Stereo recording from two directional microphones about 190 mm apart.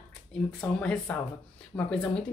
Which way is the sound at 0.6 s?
5° left (ahead or behind).